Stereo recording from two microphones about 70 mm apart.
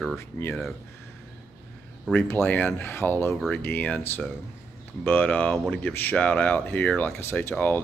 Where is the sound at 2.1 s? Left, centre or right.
Left.